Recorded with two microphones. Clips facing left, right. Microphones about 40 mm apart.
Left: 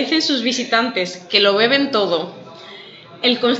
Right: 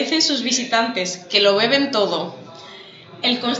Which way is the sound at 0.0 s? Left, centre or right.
Centre.